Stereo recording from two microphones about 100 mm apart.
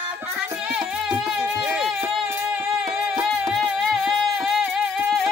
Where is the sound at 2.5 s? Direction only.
5° right (ahead or behind).